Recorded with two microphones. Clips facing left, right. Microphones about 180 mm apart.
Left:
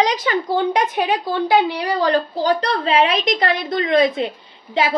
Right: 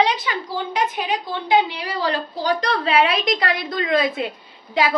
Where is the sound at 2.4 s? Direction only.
35° left (ahead or behind).